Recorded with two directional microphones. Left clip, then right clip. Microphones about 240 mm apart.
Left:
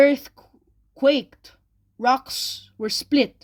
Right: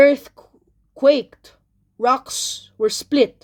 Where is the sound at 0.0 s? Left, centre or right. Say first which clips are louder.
Right 4 dB; left.